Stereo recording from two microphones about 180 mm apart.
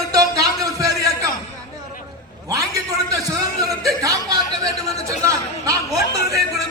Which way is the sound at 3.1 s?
20° right (ahead or behind).